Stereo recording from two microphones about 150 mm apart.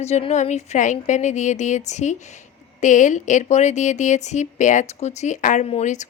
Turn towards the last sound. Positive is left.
turn(degrees=55)  # may be behind; listen again after turning